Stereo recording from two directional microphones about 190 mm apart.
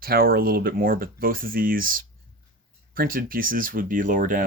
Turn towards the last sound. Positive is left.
turn(degrees=-45)  # may be behind; listen again after turning